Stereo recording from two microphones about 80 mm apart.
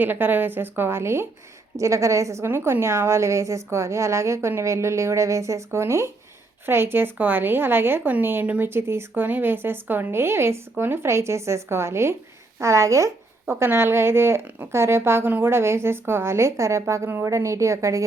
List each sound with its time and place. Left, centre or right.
0.0 s a woman's voice: right